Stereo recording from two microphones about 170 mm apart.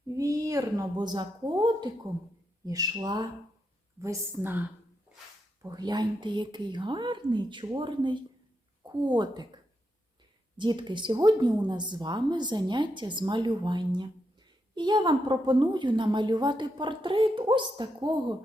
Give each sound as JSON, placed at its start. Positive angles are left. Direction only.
{"t": 0.2, "sound": "a woman's voice", "side_deg": -20}
{"t": 5.6, "sound": "a woman's voice", "side_deg": -25}
{"t": 10.6, "sound": "a woman's voice", "side_deg": -25}